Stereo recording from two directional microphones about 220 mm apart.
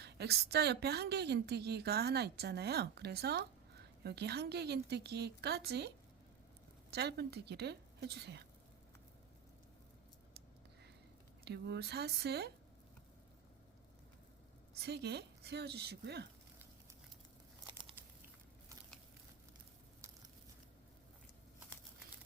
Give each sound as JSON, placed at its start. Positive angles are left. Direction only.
{"t": 0.0, "sound": "a woman's voice", "side_deg": -50}
{"t": 6.9, "sound": "a woman's voice", "side_deg": -50}
{"t": 11.4, "sound": "a woman's voice", "side_deg": -50}
{"t": 14.7, "sound": "a woman's voice", "side_deg": -45}
{"t": 18.0, "sound": "a sound", "side_deg": -10}